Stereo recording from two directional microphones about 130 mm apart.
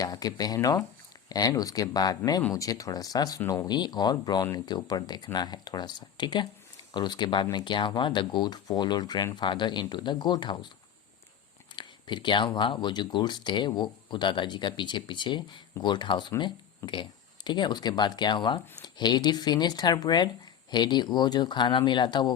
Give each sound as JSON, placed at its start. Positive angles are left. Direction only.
{"t": 0.0, "sound": "speech", "side_deg": 30}
{"t": 11.8, "sound": "speech", "side_deg": 35}